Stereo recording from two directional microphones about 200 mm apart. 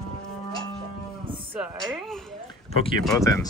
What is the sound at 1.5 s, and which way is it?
Speech, 5° right (ahead or behind).